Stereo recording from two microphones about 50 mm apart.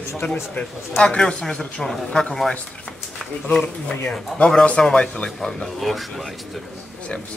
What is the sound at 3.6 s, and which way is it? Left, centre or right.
Speech, left.